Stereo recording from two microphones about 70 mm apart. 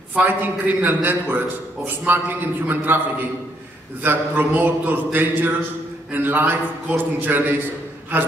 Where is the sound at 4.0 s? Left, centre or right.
Right.